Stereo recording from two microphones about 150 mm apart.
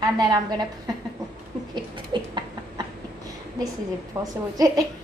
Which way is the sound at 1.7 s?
30° right (ahead or behind).